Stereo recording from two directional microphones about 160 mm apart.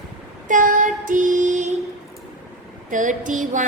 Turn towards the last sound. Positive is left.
turn(degrees=-50)  # may be behind; listen again after turning